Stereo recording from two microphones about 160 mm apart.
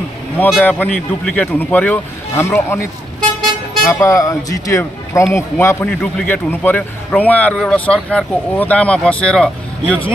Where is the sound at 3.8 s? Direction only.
20° left (ahead or behind).